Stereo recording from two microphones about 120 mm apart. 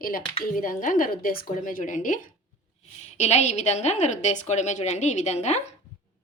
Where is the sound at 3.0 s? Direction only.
65° left (ahead or behind).